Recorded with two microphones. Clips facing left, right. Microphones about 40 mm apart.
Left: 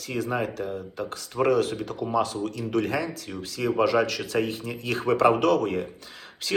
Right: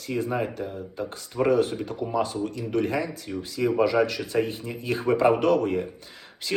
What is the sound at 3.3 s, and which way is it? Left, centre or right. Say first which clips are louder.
Speech: right 3 dB; left.